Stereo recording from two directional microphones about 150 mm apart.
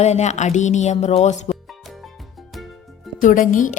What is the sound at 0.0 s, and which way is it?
Speech, 50° left (ahead or behind).